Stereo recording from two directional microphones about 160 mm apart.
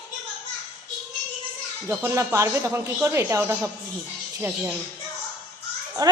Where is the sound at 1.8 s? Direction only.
15° right (ahead or behind).